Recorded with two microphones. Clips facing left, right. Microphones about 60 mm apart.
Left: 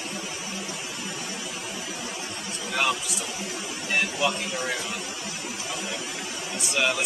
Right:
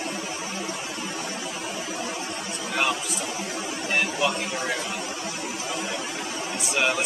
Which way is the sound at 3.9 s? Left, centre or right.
Centre.